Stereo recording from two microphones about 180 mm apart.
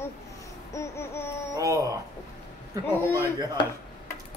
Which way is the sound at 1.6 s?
20° right (ahead or behind).